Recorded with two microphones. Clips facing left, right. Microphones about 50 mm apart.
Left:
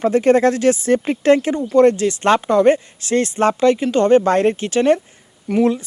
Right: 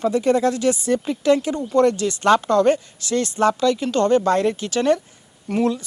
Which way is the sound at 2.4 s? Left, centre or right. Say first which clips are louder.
Left 3 dB; left.